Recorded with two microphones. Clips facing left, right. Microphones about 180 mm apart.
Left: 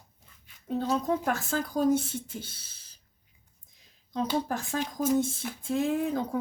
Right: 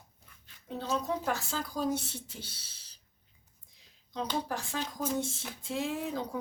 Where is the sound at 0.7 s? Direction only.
50° left (ahead or behind).